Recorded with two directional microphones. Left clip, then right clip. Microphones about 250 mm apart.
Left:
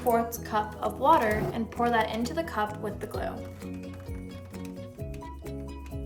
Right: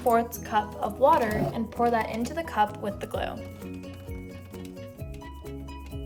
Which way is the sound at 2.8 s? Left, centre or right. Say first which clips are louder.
Right 2 dB; centre.